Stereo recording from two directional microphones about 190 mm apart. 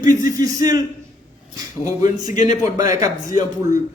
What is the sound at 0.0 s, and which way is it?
Speech, 20° right (ahead or behind).